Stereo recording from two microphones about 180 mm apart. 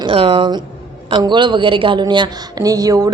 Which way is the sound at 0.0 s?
30° right (ahead or behind).